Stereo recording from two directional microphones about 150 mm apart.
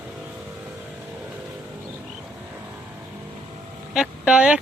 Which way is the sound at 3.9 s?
5° right (ahead or behind).